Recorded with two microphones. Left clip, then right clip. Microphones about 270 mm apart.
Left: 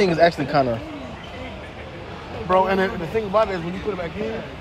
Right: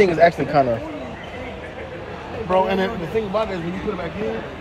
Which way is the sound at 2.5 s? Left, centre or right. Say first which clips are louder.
Left 1 dB; centre.